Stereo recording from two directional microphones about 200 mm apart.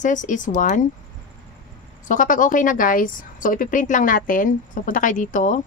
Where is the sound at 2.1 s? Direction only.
40° left (ahead or behind).